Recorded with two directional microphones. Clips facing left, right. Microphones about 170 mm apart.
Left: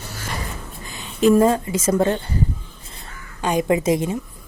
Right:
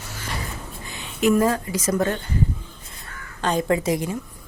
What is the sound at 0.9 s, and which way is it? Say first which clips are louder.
Speech: left 4 dB; 35° left (ahead or behind).